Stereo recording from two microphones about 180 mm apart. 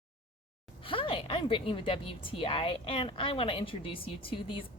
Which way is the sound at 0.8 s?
30° left (ahead or behind).